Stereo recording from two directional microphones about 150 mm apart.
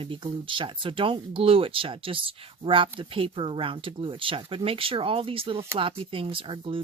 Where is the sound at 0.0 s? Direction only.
35° right (ahead or behind).